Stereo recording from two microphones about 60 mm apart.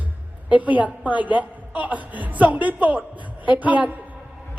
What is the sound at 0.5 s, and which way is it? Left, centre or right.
A woman's voice, right.